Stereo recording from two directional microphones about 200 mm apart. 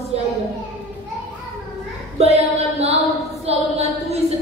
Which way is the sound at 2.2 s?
35° right (ahead or behind).